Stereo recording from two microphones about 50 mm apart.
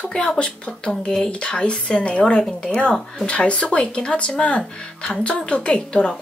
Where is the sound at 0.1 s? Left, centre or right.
Centre.